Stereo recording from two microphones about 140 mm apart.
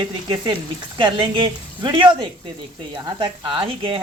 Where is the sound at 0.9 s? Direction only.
35° right (ahead or behind).